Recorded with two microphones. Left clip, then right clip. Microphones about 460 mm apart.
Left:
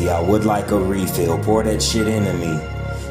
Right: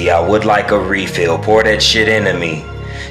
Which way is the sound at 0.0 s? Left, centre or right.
Left.